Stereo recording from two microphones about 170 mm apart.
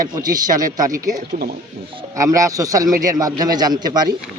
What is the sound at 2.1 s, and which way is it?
A man's voice, 20° right (ahead or behind).